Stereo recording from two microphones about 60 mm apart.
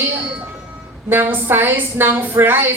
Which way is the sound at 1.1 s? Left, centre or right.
Right.